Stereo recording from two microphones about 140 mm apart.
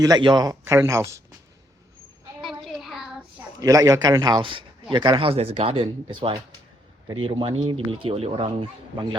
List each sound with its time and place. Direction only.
0.0 s speech: 30° right (ahead or behind)
2.4 s child singing: centre (ahead or behind)
3.6 s speech: 25° right (ahead or behind); by 8.5 s 40° right (ahead or behind)